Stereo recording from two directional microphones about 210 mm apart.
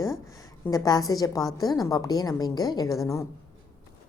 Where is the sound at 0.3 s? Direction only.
15° left (ahead or behind).